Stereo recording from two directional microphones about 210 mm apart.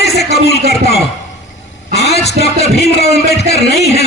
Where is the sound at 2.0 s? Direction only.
50° left (ahead or behind).